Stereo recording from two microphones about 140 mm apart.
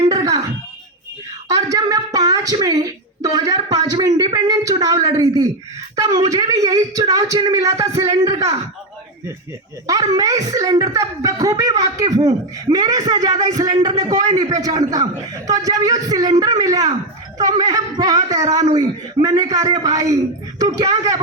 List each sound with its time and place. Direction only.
0.0 s a sound: 25° right (ahead or behind)
1.5 s a woman's voice: 25° right (ahead or behind)
9.8 s speech: 25° right (ahead or behind)